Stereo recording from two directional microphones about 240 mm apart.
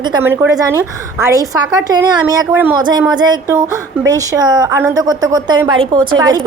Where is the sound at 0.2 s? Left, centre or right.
Centre.